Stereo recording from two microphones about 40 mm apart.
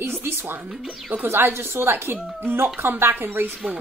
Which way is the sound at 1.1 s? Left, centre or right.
Right.